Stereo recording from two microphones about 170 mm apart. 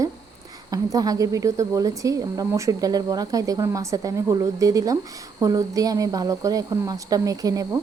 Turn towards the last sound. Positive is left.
turn(degrees=-20)  # may be behind; listen again after turning